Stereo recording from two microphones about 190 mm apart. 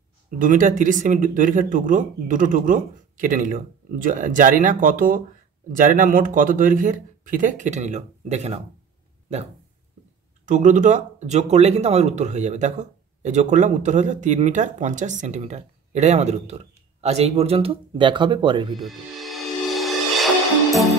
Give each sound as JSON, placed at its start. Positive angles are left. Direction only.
{"t": 0.4, "sound": "speech", "side_deg": -45}
{"t": 10.4, "sound": "speech", "side_deg": -40}
{"t": 18.8, "sound": "music", "side_deg": 0}